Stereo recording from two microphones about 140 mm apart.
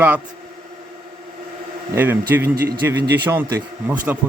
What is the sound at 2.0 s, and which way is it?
Speech, 15° right (ahead or behind).